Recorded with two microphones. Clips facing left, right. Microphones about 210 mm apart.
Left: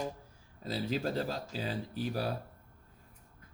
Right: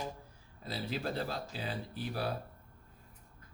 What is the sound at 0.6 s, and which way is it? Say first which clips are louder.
Speech: left 4 dB; 40° left (ahead or behind).